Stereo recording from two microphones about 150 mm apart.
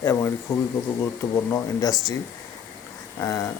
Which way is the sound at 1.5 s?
25° left (ahead or behind).